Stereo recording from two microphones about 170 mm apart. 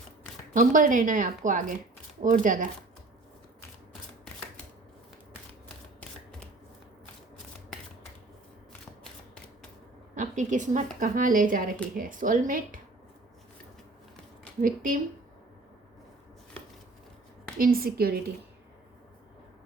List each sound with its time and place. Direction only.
0.5 s a woman's voice: 50° right (ahead or behind)
10.2 s a woman's voice: 45° right (ahead or behind)
14.6 s a woman's voice: 55° right (ahead or behind)
17.6 s a woman's voice: 60° right (ahead or behind)